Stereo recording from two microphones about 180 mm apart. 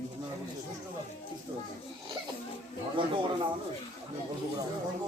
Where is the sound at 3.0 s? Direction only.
30° right (ahead or behind).